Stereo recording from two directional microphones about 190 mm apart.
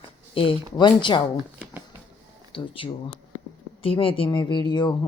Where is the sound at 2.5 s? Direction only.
30° left (ahead or behind).